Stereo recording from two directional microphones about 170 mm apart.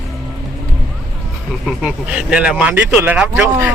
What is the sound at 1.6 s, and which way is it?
Speech, 5° right (ahead or behind).